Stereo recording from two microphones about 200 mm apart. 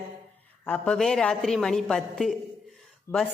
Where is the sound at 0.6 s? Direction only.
5° left (ahead or behind).